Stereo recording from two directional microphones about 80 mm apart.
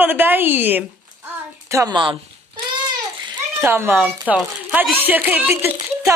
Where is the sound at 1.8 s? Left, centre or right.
Right.